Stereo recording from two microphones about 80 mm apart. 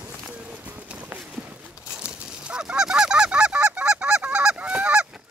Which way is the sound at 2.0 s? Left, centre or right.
Centre.